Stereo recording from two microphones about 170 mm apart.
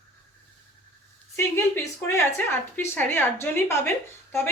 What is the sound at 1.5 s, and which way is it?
A woman's voice, 15° left (ahead or behind).